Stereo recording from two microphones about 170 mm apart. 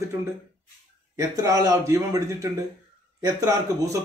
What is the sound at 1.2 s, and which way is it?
Speech, 20° right (ahead or behind).